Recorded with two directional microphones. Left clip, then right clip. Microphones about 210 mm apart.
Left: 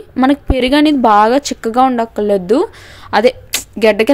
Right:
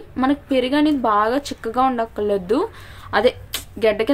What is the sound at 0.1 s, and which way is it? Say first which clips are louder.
A woman's voice: left 6 dB; 35° left (ahead or behind).